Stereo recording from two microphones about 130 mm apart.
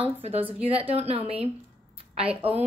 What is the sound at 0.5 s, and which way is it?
Speech, 45° right (ahead or behind).